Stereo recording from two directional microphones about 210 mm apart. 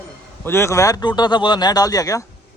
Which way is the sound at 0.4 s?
10° left (ahead or behind).